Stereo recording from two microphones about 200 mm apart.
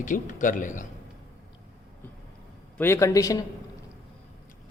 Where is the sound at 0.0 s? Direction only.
40° left (ahead or behind).